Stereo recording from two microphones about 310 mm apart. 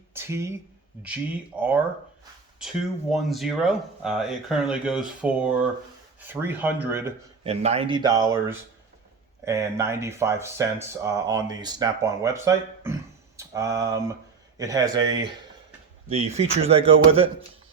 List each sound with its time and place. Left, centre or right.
0.1 s speech: centre
1.5 s speech: centre
7.4 s speech: centre